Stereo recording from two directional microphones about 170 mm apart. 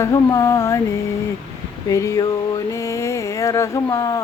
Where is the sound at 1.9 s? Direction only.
20° left (ahead or behind).